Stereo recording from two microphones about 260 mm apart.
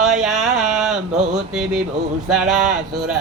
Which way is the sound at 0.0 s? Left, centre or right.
Centre.